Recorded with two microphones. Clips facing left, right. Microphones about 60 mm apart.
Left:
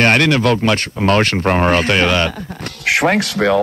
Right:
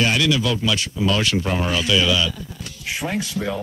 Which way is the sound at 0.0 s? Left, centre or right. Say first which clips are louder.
Left 7 dB; left.